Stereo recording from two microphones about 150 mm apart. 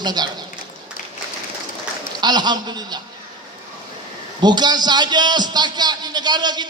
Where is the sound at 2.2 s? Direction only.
30° right (ahead or behind).